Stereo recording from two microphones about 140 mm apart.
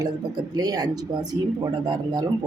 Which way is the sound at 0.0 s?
25° right (ahead or behind).